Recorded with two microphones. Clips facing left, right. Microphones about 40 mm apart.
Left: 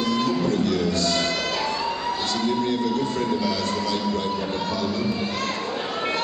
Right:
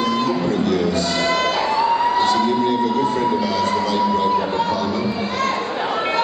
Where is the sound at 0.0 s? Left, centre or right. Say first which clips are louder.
Right 3 dB; centre.